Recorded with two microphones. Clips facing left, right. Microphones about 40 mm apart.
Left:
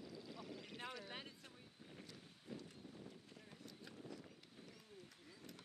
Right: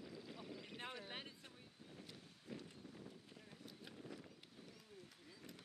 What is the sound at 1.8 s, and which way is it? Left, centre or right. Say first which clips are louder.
Boat: even; centre.